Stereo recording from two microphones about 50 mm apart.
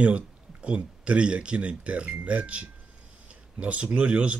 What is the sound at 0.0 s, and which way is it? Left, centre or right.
Speech, right.